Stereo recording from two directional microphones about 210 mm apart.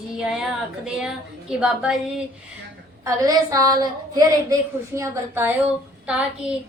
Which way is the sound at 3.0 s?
15° right (ahead or behind).